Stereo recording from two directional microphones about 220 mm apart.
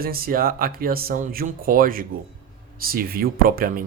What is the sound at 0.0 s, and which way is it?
Speech, 40° right (ahead or behind).